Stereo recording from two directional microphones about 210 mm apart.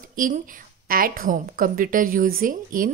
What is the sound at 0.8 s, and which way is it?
A woman's voice, 45° right (ahead or behind).